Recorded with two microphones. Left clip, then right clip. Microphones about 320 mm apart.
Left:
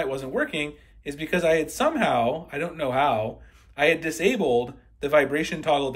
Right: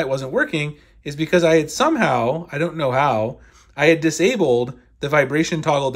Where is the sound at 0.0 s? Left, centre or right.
Centre.